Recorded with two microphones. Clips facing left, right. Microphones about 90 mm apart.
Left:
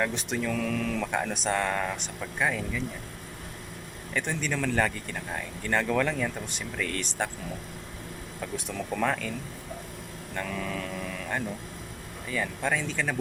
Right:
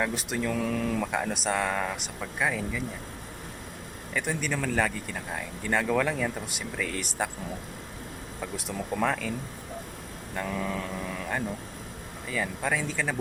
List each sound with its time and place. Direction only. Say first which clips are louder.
0.0 s speech: even; 5° right (ahead or behind)
0.5 s speech: right 2 dB; 15° right (ahead or behind)
1.1 s speech: even; 5° right (ahead or behind)
4.1 s speech: even; 5° right (ahead or behind)
8.4 s speech: even; 5° right (ahead or behind)
12.3 s speech: even; 5° right (ahead or behind)